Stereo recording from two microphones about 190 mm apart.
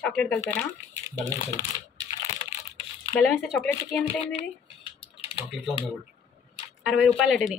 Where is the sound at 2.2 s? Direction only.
30° left (ahead or behind).